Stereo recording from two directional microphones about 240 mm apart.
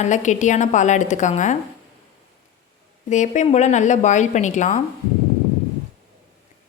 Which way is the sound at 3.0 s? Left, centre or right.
Left.